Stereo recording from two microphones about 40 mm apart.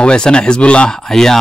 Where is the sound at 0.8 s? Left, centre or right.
Centre.